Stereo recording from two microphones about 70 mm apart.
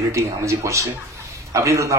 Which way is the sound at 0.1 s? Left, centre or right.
Right.